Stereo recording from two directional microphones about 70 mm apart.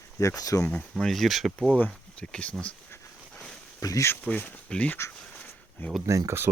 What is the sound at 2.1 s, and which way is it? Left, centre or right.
Speech, centre.